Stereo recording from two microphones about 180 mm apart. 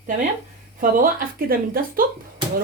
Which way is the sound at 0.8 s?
50° right (ahead or behind).